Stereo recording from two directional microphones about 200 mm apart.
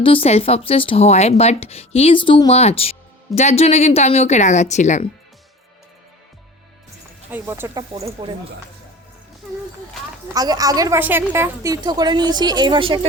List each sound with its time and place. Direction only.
0.0 s speech: 25° left (ahead or behind)
7.3 s speech: 10° right (ahead or behind)
7.7 s a woman's voice: 20° right (ahead or behind)
10.3 s a woman's voice: 20° right (ahead or behind)